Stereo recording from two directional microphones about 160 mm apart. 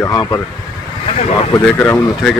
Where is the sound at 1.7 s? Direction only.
15° left (ahead or behind).